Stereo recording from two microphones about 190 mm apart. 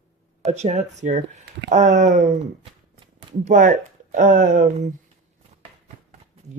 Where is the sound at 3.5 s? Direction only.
45° right (ahead or behind).